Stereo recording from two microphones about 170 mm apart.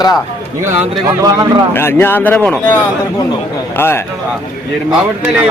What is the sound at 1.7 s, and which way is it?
Speech, 15° left (ahead or behind).